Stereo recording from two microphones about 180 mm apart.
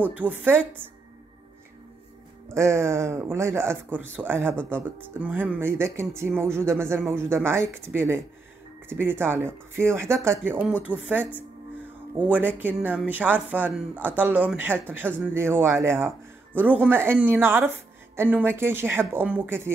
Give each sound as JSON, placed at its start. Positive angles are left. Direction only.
{"t": 0.0, "sound": "speech", "side_deg": -10}
{"t": 2.5, "sound": "speech", "side_deg": -15}
{"t": 12.3, "sound": "speech", "side_deg": -10}